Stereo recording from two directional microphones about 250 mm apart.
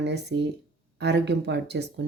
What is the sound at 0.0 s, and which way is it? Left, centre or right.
Speech, right.